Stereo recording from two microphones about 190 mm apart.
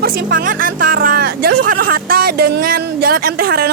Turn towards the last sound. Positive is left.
turn(degrees=-50)  # may be behind; listen again after turning